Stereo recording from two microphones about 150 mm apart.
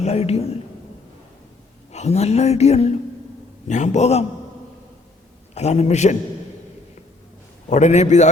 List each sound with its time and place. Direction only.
0.0 s a woman's voice: 45° left (ahead or behind)
1.9 s a woman's voice: 45° left (ahead or behind)
5.5 s a woman's voice: 45° left (ahead or behind)
7.7 s a woman's voice: 50° left (ahead or behind)